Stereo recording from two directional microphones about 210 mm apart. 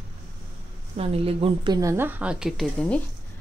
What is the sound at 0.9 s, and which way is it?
Speech, 25° right (ahead or behind).